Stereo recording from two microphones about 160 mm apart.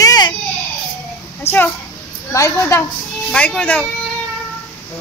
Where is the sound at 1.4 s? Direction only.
15° left (ahead or behind).